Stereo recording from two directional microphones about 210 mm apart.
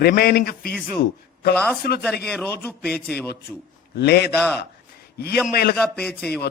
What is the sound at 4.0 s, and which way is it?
A man's voice, 50° left (ahead or behind).